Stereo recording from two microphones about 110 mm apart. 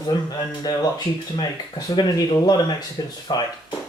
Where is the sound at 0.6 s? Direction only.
35° left (ahead or behind).